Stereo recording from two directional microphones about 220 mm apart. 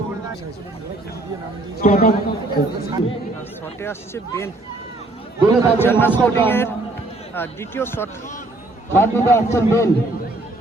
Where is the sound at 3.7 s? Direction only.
10° left (ahead or behind).